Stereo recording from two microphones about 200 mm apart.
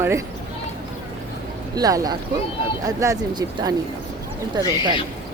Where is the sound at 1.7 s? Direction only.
20° right (ahead or behind).